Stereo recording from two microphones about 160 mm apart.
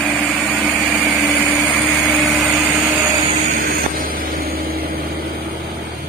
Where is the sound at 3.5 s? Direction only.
60° right (ahead or behind).